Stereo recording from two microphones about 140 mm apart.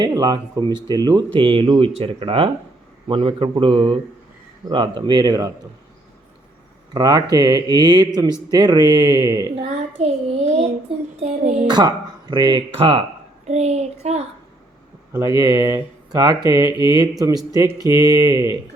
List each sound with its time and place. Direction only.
0.0 s speech: 30° right (ahead or behind)
6.9 s speech: 30° right (ahead or behind)
9.6 s a child's voice: 50° right (ahead or behind)
11.7 s speech: 30° right (ahead or behind); by 14.3 s 50° right (ahead or behind)
15.1 s speech: 25° right (ahead or behind)